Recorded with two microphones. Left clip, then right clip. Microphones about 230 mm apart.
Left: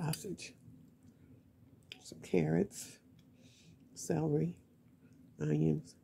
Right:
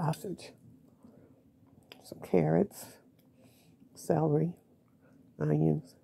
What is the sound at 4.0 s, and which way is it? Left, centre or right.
Speech, right.